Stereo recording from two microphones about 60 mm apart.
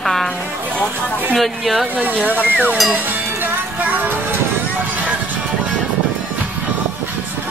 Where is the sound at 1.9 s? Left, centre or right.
Right.